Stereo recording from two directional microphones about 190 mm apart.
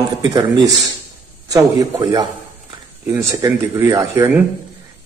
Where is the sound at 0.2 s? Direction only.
20° right (ahead or behind).